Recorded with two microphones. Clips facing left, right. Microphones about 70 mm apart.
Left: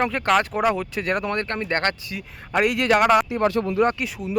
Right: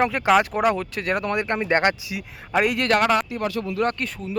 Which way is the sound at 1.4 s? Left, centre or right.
Centre.